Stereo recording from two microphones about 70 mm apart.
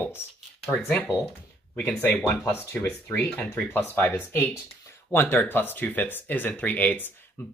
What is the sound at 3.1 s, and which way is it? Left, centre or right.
Speech, left.